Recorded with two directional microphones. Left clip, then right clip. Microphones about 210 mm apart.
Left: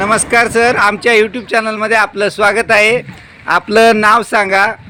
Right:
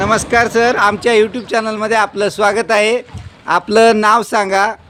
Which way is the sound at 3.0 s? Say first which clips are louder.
Left 3 dB; 30° right (ahead or behind).